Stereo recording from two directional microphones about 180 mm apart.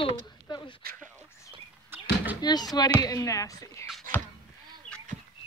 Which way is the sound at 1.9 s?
10° right (ahead or behind).